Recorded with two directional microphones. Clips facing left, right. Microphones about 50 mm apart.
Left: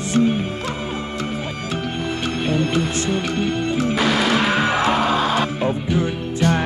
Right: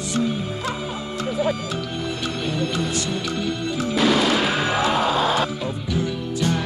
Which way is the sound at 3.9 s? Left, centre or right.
Centre.